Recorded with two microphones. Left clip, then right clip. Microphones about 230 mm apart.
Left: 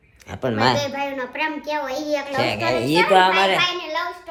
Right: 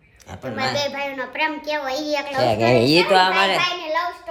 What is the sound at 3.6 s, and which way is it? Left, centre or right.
Child singing, right.